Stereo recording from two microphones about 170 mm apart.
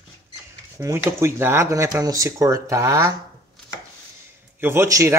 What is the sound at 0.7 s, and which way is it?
Speech, 15° right (ahead or behind).